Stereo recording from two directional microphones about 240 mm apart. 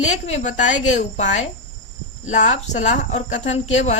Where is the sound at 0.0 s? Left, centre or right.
Left.